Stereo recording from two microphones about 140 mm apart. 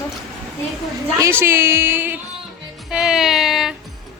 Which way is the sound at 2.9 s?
5° right (ahead or behind).